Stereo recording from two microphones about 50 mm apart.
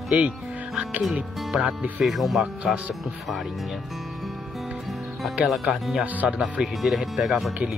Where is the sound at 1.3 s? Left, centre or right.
Centre.